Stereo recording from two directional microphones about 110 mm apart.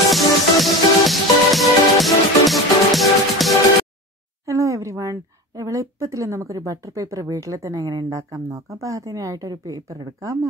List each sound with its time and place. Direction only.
0.1 s music: centre (ahead or behind)
4.5 s a woman's voice: 30° right (ahead or behind)